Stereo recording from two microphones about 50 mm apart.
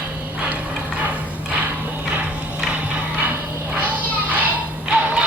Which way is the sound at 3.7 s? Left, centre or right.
Right.